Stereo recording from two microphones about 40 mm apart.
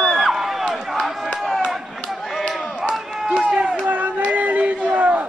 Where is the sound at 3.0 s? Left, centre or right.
Centre.